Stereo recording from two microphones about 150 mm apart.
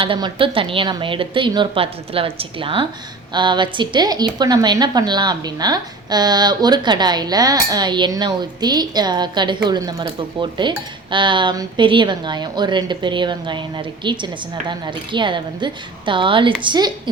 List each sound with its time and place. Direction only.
0.0 s a woman's voice: 35° right (ahead or behind)